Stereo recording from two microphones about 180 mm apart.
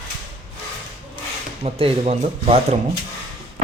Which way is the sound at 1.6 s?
30° right (ahead or behind).